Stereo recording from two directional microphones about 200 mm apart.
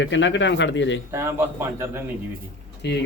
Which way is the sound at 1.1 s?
10° right (ahead or behind).